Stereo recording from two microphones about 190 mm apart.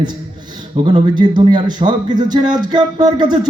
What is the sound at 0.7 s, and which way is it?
A man's voice, 25° right (ahead or behind).